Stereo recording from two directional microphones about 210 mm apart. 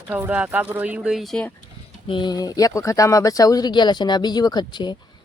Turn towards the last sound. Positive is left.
turn(degrees=20)  # may be behind; listen again after turning